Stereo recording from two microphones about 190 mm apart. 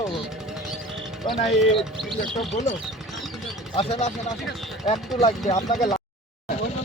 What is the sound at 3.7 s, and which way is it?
Speech, 30° left (ahead or behind).